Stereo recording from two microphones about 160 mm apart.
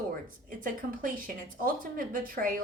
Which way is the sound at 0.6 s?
60° right (ahead or behind).